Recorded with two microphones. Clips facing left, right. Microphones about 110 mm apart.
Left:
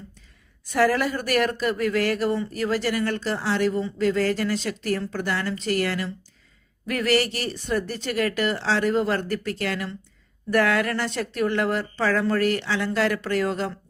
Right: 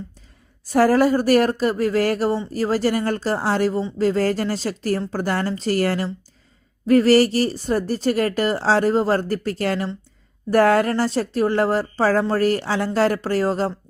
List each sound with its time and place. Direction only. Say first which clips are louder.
0.6 s speech: right 5 dB; 40° right (ahead or behind)